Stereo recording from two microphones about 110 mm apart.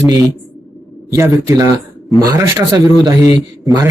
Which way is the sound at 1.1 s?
25° right (ahead or behind).